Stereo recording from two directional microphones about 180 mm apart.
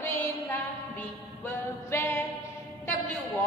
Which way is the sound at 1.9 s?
15° left (ahead or behind).